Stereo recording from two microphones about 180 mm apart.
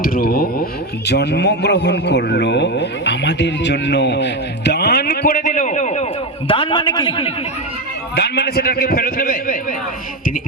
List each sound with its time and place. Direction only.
0.0 s a sound: 55° left (ahead or behind)
1.0 s a man's voice: 70° left (ahead or behind); by 6.1 s 40° left (ahead or behind)
6.5 s a man's voice: 30° left (ahead or behind)
8.1 s a man's voice: 65° left (ahead or behind)